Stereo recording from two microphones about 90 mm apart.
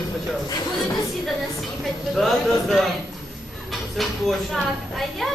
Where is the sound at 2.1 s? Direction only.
Centre (ahead or behind).